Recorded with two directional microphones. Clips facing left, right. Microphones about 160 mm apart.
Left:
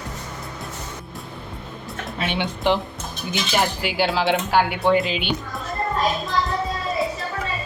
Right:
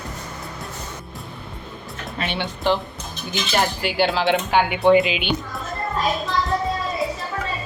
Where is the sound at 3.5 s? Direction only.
5° left (ahead or behind).